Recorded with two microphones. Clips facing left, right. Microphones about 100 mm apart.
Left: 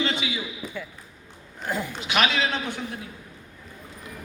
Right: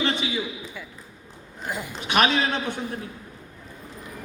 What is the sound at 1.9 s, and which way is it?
Speech, 35° right (ahead or behind).